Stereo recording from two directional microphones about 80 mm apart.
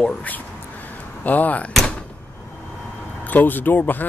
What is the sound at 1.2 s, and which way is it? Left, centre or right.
Speech, left.